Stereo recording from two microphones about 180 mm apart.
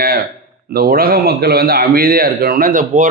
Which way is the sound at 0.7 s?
55° right (ahead or behind).